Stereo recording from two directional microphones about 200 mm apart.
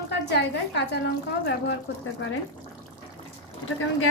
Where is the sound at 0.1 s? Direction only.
60° left (ahead or behind).